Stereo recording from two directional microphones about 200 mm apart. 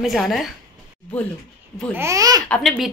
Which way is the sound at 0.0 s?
Centre (ahead or behind).